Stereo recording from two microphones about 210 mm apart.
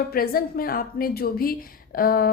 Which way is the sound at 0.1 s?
45° left (ahead or behind).